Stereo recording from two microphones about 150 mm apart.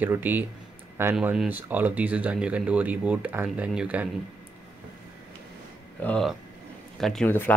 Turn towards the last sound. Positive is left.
turn(degrees=10)  # may be behind; listen again after turning